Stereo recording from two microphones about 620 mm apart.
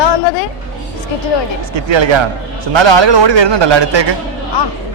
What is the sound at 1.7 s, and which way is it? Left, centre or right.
A man's voice, right.